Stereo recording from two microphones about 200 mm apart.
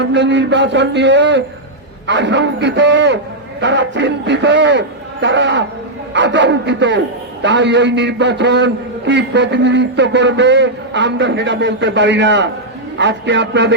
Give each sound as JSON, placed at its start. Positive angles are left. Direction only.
{"t": 0.0, "sound": "a man's voice", "side_deg": -60}